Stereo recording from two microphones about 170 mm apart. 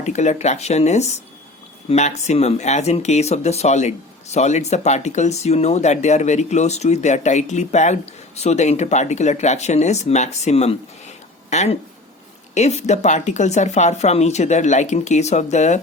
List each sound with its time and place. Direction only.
0.0 s speech: 45° left (ahead or behind)